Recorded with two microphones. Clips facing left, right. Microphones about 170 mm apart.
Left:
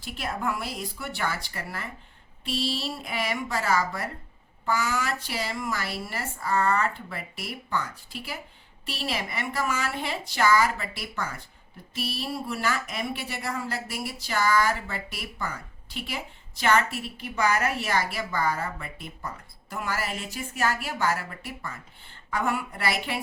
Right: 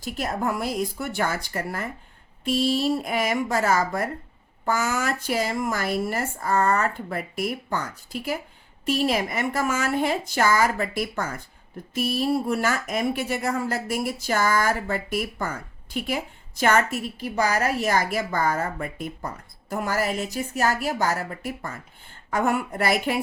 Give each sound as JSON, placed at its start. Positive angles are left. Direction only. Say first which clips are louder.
{"t": 0.0, "sound": "speech", "louder": "right 4 dB", "side_deg": -40}